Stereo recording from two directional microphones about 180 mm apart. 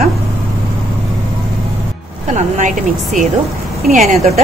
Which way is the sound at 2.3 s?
45° right (ahead or behind).